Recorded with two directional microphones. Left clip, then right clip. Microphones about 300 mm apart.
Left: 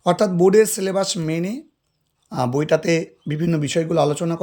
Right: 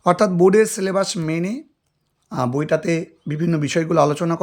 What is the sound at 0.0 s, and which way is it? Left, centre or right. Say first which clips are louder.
Speech: right 2 dB; centre.